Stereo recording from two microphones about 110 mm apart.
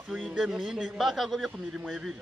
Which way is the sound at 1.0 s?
Centre (ahead or behind).